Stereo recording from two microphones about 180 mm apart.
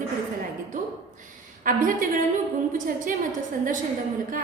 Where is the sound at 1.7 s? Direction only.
50° right (ahead or behind).